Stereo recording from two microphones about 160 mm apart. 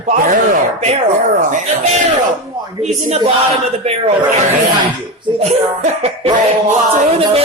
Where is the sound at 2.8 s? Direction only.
45° right (ahead or behind).